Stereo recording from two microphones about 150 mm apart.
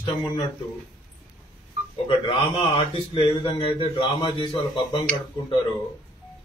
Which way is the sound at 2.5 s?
35° left (ahead or behind).